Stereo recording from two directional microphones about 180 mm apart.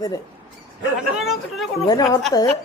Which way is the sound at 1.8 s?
20° left (ahead or behind).